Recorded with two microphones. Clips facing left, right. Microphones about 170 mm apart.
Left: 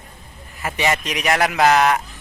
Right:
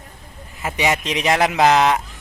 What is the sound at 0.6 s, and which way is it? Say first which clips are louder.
Speech: right 1 dB; 20° right (ahead or behind).